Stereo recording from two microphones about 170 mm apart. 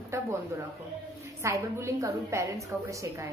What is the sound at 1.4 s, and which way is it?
A woman's voice, 15° right (ahead or behind).